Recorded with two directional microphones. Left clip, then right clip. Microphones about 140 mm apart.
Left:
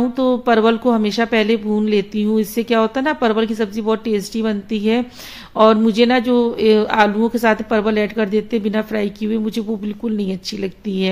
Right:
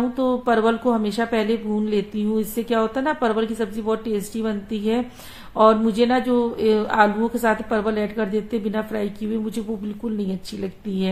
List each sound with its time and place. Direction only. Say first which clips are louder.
0.2 s a woman's voice: left 5 dB; 30° left (ahead or behind)